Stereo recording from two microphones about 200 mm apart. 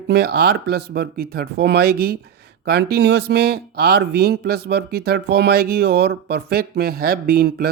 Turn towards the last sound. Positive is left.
turn(degrees=-50)  # may be behind; listen again after turning